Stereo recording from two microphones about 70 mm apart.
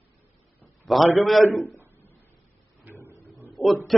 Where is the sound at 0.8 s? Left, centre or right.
Centre.